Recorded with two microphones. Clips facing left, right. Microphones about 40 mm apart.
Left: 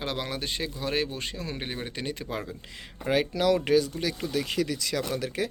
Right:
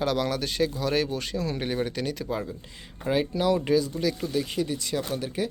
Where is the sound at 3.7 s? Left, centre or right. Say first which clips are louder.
Even; left.